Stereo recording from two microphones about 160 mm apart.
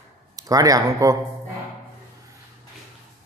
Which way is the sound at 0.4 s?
20° right (ahead or behind).